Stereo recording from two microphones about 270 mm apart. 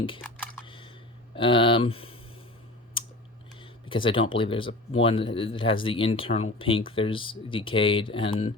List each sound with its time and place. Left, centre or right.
0.2 s computer keyboard: centre
0.6 s computer keyboard: centre
1.4 s speech: centre
3.0 s typing: centre
3.6 s speech: centre